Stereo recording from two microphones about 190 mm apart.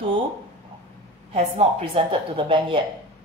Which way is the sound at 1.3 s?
30° right (ahead or behind).